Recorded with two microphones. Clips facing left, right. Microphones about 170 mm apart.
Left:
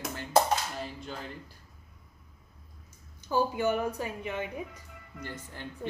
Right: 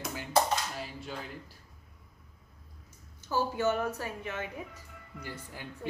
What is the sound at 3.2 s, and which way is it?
A woman's voice, 15° left (ahead or behind).